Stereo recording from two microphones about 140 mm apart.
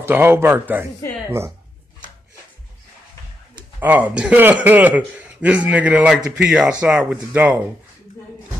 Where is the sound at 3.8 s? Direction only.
10° right (ahead or behind).